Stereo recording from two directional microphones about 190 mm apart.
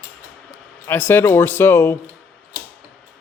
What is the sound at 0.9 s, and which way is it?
Speech, 10° left (ahead or behind).